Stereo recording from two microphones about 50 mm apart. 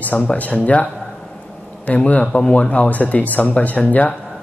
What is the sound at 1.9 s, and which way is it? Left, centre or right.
Speech, left.